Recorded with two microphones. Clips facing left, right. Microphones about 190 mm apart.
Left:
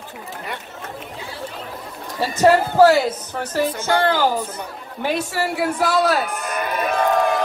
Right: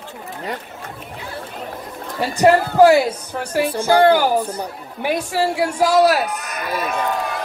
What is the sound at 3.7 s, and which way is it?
Speech, 35° right (ahead or behind).